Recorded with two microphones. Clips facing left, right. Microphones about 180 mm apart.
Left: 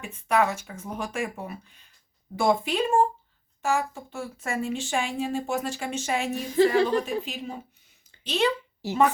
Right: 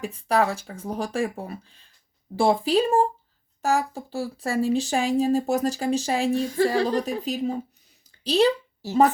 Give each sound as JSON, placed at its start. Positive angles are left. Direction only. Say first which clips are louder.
{"t": 0.0, "sound": "speech", "louder": "right 2 dB", "side_deg": -35}